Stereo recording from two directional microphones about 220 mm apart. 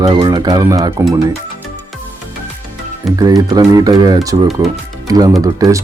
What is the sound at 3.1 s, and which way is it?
Speech, 15° right (ahead or behind).